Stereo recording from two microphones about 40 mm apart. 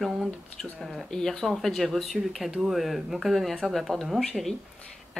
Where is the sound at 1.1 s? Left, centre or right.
Centre.